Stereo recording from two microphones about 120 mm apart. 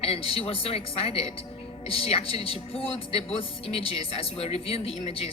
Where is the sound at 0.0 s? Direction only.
55° left (ahead or behind).